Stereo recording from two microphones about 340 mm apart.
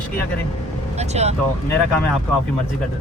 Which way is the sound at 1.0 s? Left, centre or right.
Centre.